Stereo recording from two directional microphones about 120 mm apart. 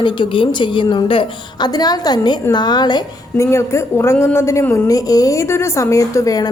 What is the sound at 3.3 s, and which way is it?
A woman's voice, 25° left (ahead or behind).